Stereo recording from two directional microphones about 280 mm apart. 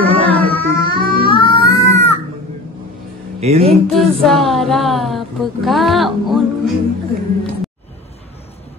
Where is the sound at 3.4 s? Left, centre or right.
Right.